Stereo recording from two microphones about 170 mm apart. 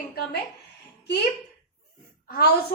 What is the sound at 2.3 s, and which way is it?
Speech, 65° left (ahead or behind).